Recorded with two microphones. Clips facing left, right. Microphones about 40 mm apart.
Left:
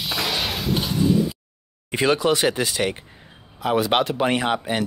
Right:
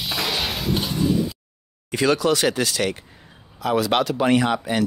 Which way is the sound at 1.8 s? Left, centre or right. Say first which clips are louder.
Even; left.